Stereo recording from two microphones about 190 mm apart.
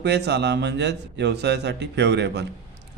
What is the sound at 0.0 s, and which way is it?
Speech, 60° right (ahead or behind).